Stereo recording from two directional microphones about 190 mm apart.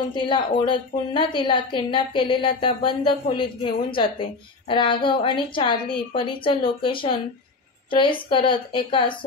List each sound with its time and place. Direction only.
0.1 s a woman's voice: 25° left (ahead or behind)